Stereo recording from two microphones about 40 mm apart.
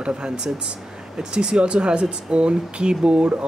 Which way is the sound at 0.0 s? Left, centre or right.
Right.